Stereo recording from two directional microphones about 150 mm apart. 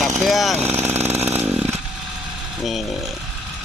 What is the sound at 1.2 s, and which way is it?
Chainsaw, 15° right (ahead or behind).